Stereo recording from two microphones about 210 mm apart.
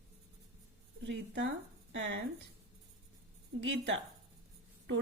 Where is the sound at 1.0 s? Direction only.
55° right (ahead or behind).